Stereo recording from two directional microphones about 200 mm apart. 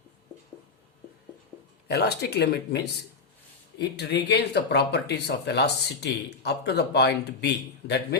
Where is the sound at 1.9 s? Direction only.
55° left (ahead or behind).